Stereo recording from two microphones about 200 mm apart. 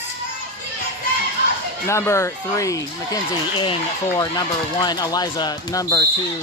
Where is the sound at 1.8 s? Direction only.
15° left (ahead or behind).